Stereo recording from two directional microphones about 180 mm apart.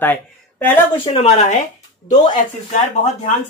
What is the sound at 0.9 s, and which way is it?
Speech, 30° left (ahead or behind).